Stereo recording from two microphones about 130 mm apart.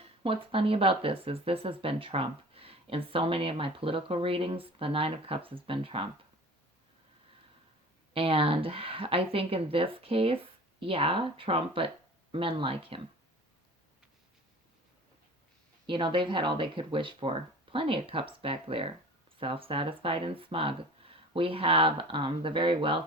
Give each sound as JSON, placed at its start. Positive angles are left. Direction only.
{"t": 0.2, "sound": "speech", "side_deg": -45}
{"t": 8.1, "sound": "speech", "side_deg": -45}
{"t": 15.9, "sound": "speech", "side_deg": -40}